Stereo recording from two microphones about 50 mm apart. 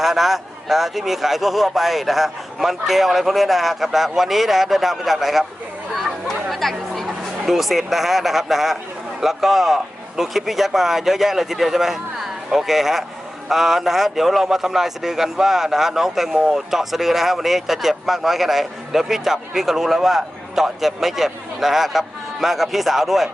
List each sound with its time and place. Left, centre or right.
0.0 s a man's voice: centre
5.9 s chatter: centre
9.2 s a man's voice: centre